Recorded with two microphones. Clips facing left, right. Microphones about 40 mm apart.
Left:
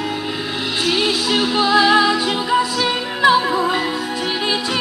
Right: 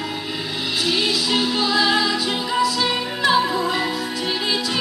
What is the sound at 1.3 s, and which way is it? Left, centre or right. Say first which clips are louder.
Music: left 6 dB; left.